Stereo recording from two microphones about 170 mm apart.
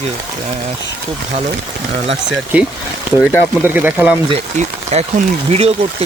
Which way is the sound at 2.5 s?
10° right (ahead or behind).